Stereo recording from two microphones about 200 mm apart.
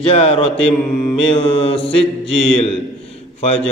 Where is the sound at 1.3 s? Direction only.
30° left (ahead or behind).